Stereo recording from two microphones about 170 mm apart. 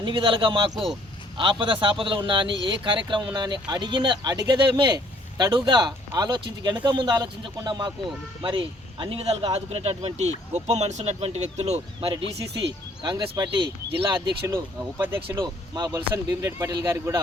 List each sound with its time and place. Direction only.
0.0 s a man's voice: 30° right (ahead or behind); by 15.4 s 15° right (ahead or behind)
15.4 s speech: 25° right (ahead or behind)